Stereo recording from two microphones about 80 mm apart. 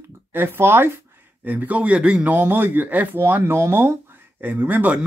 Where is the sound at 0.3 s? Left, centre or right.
Right.